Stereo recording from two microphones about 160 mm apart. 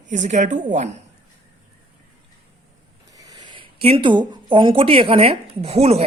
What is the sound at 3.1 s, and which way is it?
Speech, 20° right (ahead or behind).